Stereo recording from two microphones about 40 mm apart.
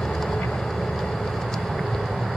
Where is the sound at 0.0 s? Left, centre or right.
Centre.